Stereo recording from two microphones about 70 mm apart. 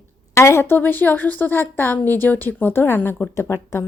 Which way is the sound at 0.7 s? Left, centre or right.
Left.